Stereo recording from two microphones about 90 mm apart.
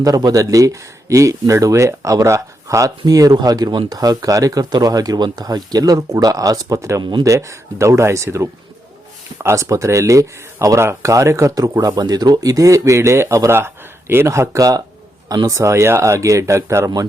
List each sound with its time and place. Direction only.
0.0 s speech: 45° right (ahead or behind)
7.0 s speech: 60° right (ahead or behind)
7.3 s speech: 35° right (ahead or behind)